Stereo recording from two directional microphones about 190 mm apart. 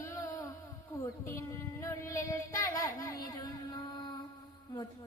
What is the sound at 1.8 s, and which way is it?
Child singing, 15° left (ahead or behind).